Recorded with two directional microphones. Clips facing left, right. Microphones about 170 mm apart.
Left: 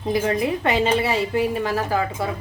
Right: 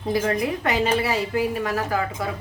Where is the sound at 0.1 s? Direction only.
25° left (ahead or behind).